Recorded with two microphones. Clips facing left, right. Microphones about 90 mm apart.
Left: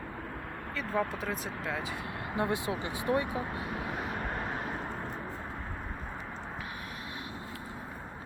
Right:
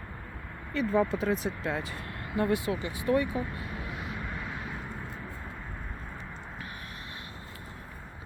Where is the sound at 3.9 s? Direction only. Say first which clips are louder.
Left 3 dB; 45° left (ahead or behind).